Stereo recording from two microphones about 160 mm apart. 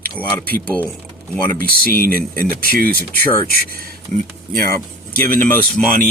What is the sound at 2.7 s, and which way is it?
Speech, 65° right (ahead or behind).